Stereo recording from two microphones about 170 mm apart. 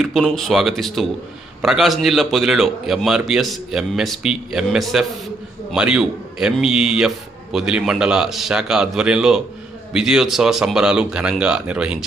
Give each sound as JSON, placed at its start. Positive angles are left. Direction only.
{"t": 0.0, "sound": "a man's voice", "side_deg": 0}